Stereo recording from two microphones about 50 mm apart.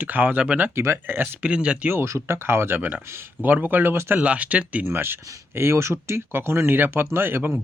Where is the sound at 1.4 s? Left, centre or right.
Right.